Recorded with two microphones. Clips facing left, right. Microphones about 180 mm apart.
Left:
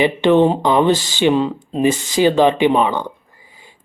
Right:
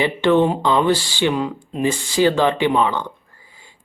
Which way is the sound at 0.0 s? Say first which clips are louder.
Left 3 dB; 20° left (ahead or behind).